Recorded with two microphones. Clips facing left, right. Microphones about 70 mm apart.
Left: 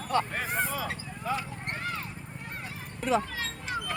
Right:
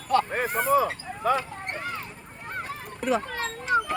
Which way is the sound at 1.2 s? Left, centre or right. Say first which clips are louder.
Right 8 dB; right.